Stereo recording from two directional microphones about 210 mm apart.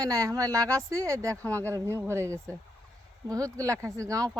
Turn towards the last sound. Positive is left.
turn(degrees=-15)  # may be behind; listen again after turning